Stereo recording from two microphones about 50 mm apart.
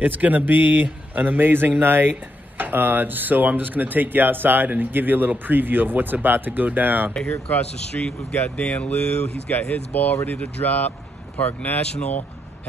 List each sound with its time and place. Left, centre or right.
0.0 s speech: right
7.5 s speech: left